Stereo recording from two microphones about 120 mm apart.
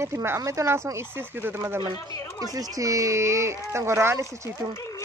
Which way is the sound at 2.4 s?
30° right (ahead or behind).